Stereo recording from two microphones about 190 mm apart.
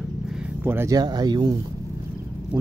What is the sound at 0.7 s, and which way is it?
Speech, 15° right (ahead or behind).